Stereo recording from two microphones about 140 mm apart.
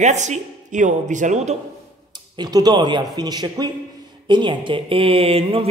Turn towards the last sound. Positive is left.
turn(degrees=-40)  # may be behind; listen again after turning